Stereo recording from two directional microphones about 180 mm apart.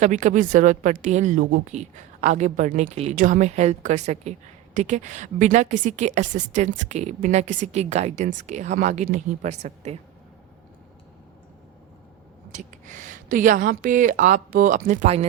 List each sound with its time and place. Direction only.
0.0 s a woman's voice: 40° right (ahead or behind)
12.5 s a woman's voice: 45° right (ahead or behind)